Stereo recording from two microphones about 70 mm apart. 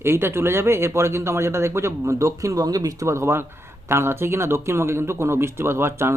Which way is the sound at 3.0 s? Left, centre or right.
Right.